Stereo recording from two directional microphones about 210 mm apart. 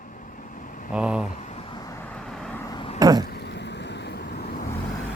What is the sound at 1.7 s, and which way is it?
Vehicle, 15° left (ahead or behind).